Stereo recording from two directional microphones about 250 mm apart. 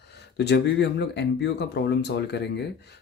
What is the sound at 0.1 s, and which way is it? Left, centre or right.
Speech, left.